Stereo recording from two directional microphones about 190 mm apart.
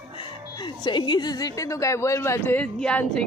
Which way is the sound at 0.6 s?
25° left (ahead or behind).